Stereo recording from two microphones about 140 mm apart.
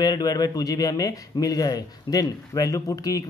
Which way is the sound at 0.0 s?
25° left (ahead or behind).